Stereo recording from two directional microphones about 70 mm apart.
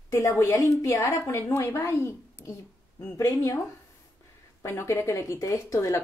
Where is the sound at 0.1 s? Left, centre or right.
Left.